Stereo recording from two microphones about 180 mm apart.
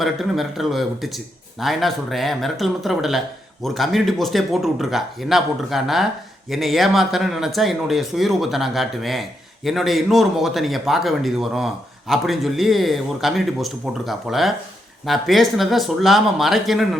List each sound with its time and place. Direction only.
0.0 s a man's voice: centre (ahead or behind)